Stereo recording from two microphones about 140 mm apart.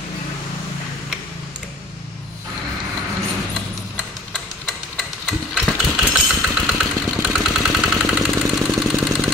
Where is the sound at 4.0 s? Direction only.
Centre (ahead or behind).